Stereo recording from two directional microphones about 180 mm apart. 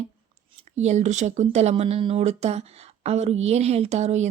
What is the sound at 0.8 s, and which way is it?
Speech, 40° right (ahead or behind).